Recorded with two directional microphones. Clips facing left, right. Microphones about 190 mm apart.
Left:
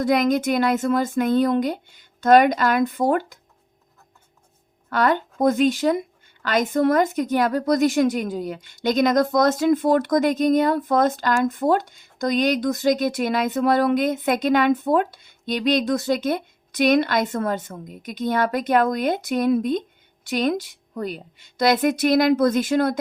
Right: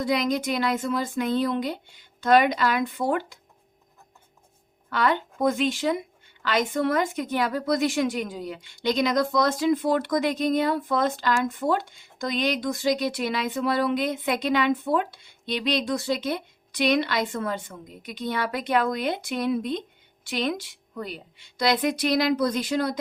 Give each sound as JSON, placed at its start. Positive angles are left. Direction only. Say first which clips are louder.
{"t": 0.0, "sound": "speech", "louder": "left 5 dB", "side_deg": 50}
{"t": 4.9, "sound": "a woman's voice", "louder": "left 4 dB", "side_deg": 45}